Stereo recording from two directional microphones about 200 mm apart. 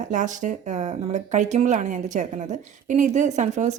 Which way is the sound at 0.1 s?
40° right (ahead or behind).